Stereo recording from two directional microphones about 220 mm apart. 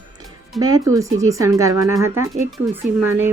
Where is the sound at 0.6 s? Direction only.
15° right (ahead or behind).